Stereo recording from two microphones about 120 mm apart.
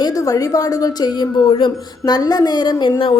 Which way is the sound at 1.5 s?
50° left (ahead or behind).